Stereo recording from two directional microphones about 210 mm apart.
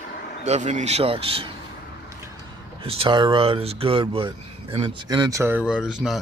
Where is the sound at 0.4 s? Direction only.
35° right (ahead or behind).